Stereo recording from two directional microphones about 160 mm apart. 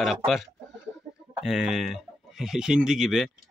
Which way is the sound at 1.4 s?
Centre (ahead or behind).